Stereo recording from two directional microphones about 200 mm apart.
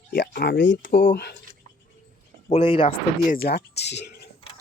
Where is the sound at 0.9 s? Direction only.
40° left (ahead or behind).